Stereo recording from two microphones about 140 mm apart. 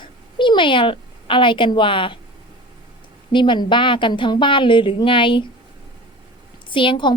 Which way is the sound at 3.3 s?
35° left (ahead or behind).